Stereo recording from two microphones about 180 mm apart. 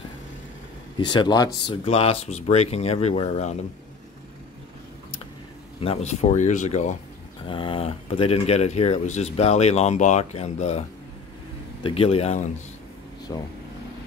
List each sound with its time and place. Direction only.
0.9 s speech: 25° left (ahead or behind)
1.9 s speech: 35° left (ahead or behind)
5.8 s speech: 35° left (ahead or behind)
7.4 s speech: 30° left (ahead or behind)
11.8 s speech: 30° left (ahead or behind)
13.3 s speech: 15° left (ahead or behind)